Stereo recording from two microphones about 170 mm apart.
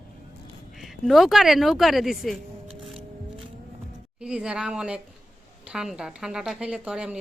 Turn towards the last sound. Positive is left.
turn(degrees=-5)  # may be behind; listen again after turning